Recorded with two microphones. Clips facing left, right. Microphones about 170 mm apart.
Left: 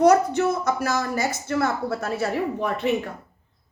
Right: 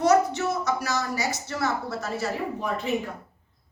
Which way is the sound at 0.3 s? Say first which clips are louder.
Left 4 dB; 55° left (ahead or behind).